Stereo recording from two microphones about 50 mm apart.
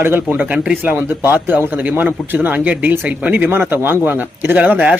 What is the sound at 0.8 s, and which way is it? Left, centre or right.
Speech, right.